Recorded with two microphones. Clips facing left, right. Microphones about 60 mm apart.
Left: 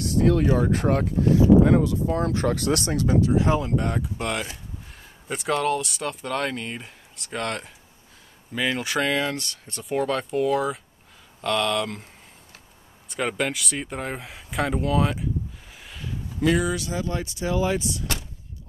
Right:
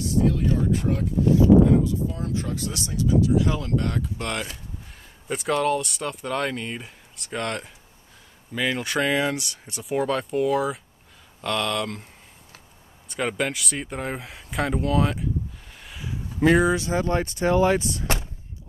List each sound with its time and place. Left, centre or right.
0.0 s speech: left
3.3 s speech: left
3.6 s speech: centre
4.2 s speech: centre
13.1 s speech: centre
15.8 s a sound: centre
16.3 s speech: right
18.0 s door: right